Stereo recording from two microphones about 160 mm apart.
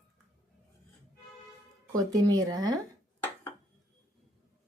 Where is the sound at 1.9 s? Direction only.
25° right (ahead or behind).